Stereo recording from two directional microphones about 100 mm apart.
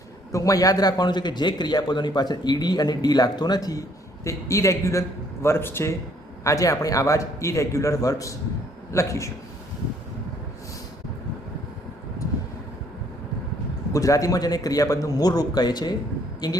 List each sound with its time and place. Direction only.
0.3 s a man's voice: 35° left (ahead or behind)
13.9 s a man's voice: 35° left (ahead or behind)